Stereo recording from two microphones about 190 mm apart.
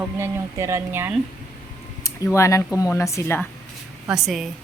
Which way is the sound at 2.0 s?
15° left (ahead or behind).